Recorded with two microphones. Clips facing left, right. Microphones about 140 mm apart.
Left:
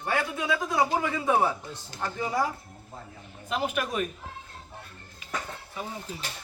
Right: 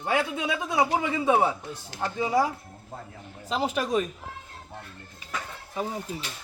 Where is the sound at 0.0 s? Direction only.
20° right (ahead or behind).